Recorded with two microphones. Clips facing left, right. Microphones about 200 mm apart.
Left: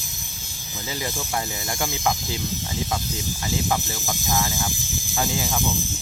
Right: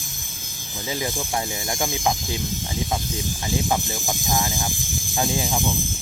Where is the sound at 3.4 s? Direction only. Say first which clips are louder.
Right 1 dB; 15° right (ahead or behind).